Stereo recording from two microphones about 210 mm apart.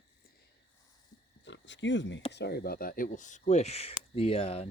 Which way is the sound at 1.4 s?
60° left (ahead or behind).